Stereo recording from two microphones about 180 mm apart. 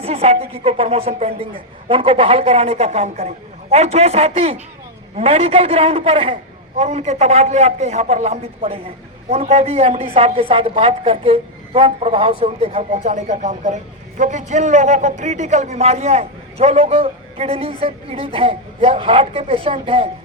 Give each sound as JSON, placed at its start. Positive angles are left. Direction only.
{"t": 0.0, "sound": "a man's voice", "side_deg": -35}